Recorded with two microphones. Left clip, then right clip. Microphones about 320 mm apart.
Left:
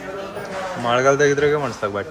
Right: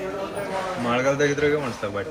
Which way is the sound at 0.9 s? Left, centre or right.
Left.